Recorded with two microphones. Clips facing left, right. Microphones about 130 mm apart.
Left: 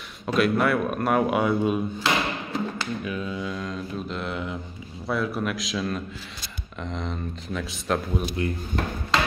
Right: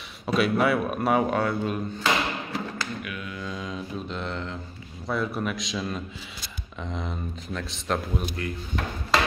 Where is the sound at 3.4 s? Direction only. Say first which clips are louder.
Left 3 dB; centre (ahead or behind).